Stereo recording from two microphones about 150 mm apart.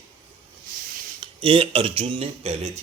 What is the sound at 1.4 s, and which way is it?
A man's voice, 35° right (ahead or behind).